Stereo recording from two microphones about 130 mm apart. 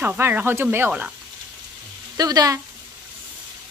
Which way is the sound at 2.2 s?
30° right (ahead or behind).